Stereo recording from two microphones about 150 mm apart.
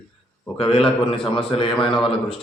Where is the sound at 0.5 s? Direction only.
35° left (ahead or behind).